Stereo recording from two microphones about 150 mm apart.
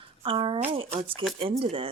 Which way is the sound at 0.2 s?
35° right (ahead or behind).